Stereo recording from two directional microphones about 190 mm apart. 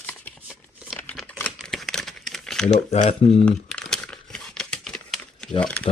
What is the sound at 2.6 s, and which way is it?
Speech, 40° left (ahead or behind).